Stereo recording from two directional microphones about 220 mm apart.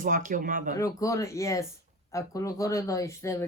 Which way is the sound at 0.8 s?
15° left (ahead or behind).